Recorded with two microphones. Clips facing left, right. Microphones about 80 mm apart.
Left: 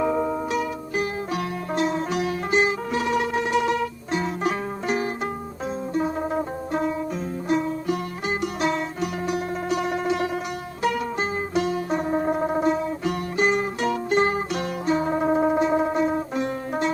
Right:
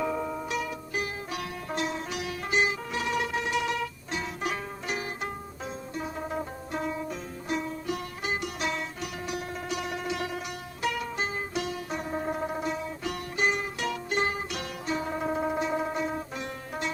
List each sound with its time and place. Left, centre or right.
0.0 s music: left